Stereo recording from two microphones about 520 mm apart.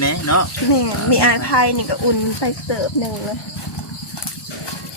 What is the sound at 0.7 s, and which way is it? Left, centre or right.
Speech, left.